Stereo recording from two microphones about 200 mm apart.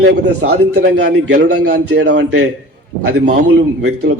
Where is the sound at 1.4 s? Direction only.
90° right; by 2.5 s 75° right (ahead or behind).